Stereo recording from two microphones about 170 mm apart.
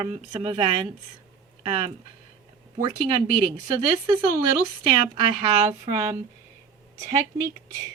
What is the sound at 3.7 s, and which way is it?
Speech, 25° right (ahead or behind).